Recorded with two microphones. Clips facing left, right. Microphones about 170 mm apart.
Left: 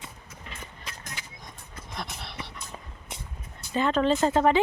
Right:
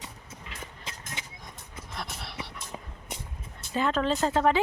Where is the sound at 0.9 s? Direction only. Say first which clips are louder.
Even; 25° right (ahead or behind).